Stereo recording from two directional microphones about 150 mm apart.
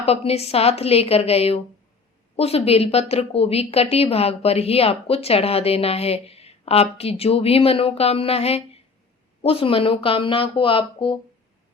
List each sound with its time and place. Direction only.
0.0 s a woman's voice: 45° left (ahead or behind)